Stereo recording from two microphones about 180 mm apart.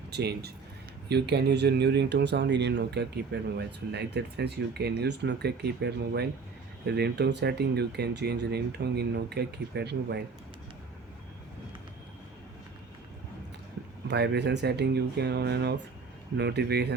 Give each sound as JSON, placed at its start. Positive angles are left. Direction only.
{"t": 0.1, "sound": "speech", "side_deg": -65}
{"t": 3.3, "sound": "speech", "side_deg": -60}
{"t": 14.1, "sound": "speech", "side_deg": -70}